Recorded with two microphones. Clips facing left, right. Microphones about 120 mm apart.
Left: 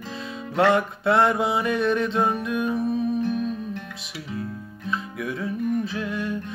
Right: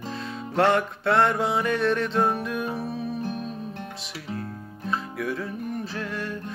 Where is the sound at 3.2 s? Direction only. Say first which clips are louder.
Left 6 dB; 40° right (ahead or behind).